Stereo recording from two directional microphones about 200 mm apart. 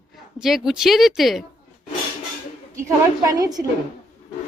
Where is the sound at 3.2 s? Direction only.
15° right (ahead or behind).